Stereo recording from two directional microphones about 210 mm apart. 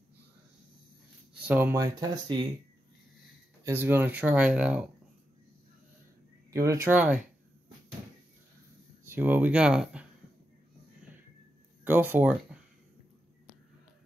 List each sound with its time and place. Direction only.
1.4 s speech: 10° right (ahead or behind)
3.6 s speech: 10° right (ahead or behind)
6.5 s speech: 15° right (ahead or behind)
9.0 s speech: 10° right (ahead or behind)
11.8 s speech: 10° right (ahead or behind)